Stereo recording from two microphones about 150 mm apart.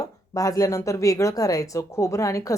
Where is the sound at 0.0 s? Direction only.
20° left (ahead or behind).